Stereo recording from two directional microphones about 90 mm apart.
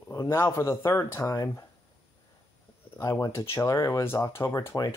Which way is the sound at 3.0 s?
35° left (ahead or behind).